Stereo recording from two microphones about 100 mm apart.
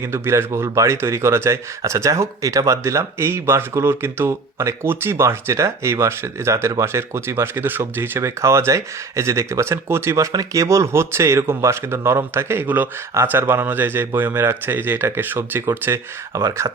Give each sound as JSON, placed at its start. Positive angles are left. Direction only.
{"t": 0.1, "sound": "speech", "side_deg": -25}